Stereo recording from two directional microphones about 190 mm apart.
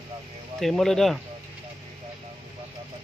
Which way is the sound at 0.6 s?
Centre (ahead or behind).